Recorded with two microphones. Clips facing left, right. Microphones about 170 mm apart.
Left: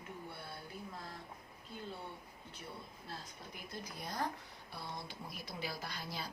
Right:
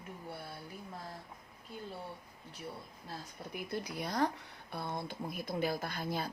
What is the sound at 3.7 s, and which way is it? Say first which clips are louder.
Speech: right 7 dB; 75° right (ahead or behind).